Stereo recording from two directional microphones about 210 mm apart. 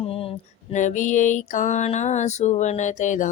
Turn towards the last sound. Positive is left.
turn(degrees=35)  # may be behind; listen again after turning